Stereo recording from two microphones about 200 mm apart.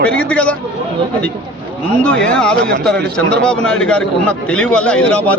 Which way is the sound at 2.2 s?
5° left (ahead or behind).